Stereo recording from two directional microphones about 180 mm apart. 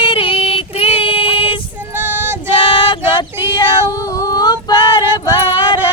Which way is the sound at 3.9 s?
20° left (ahead or behind).